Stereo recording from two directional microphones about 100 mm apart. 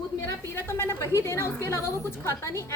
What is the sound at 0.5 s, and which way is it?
A woman's voice, 25° left (ahead or behind).